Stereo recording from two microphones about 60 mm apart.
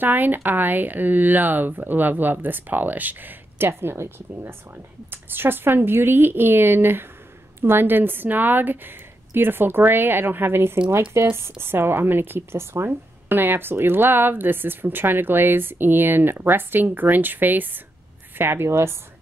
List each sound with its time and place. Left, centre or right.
0.0 s a woman's voice: right